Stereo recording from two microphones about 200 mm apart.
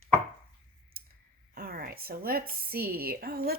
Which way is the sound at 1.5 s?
50° right (ahead or behind).